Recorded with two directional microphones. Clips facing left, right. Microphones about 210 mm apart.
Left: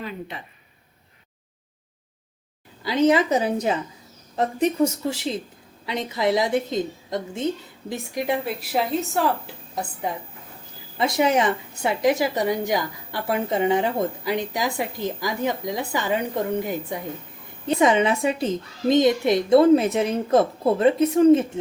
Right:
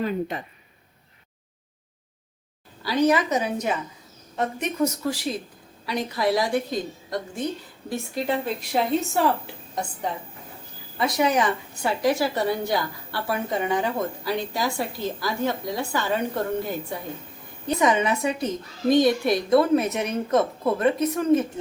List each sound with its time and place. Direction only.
0.0 s speech: 45° right (ahead or behind)
2.8 s speech: 20° left (ahead or behind); by 9.3 s centre (ahead or behind)
10.9 s a woman's voice: 25° left (ahead or behind)
17.7 s speech: 25° left (ahead or behind)